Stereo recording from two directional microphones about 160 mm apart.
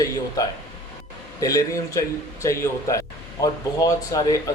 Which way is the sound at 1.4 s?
20° left (ahead or behind).